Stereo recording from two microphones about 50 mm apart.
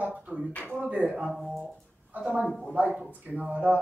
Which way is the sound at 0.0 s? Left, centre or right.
Centre.